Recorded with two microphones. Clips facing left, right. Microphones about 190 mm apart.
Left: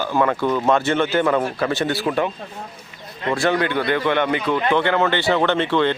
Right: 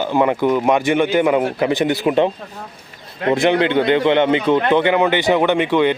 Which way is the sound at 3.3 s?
20° right (ahead or behind).